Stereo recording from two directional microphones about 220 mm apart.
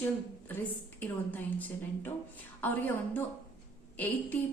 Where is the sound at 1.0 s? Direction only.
10° left (ahead or behind).